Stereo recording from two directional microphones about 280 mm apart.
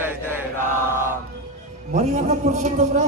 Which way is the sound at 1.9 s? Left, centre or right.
Right.